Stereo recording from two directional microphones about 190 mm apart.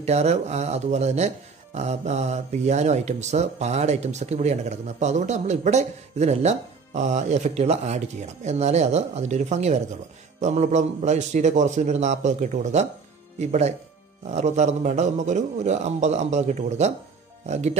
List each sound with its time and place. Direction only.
0.0 s speech: 35° right (ahead or behind)